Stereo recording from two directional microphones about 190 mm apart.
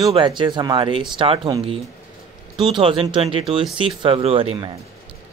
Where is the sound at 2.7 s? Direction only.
25° right (ahead or behind).